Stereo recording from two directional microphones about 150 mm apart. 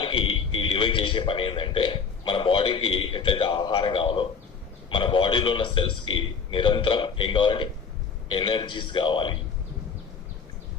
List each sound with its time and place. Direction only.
0.0 s a man's voice: 35° left (ahead or behind)